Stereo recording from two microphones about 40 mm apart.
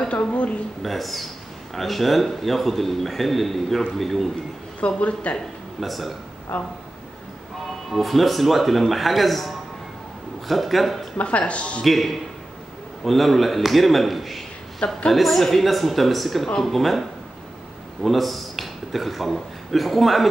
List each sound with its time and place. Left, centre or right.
0.1 s a woman's voice: left
0.8 s a man's voice: centre
4.7 s a woman's voice: left
5.8 s a man's voice: centre
6.5 s speech: left
7.9 s a man's voice: centre
11.1 s a woman's voice: left
11.8 s a man's voice: centre
18.0 s a man's voice: centre